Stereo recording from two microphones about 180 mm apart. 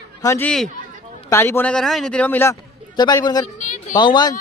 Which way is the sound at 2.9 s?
25° left (ahead or behind).